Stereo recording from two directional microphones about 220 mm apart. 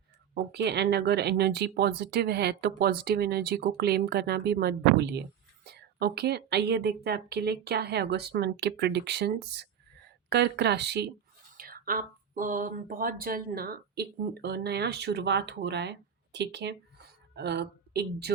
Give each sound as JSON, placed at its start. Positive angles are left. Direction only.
{"t": 0.5, "sound": "speech", "side_deg": -50}